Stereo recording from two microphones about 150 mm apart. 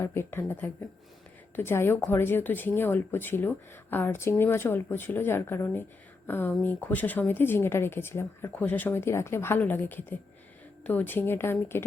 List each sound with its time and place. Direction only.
0.0 s speech: 15° left (ahead or behind)